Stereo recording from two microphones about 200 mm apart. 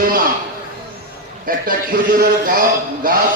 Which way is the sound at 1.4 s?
45° right (ahead or behind).